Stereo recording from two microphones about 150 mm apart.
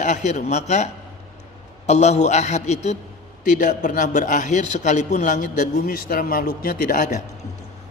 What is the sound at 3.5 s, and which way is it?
A man's voice, 60° left (ahead or behind).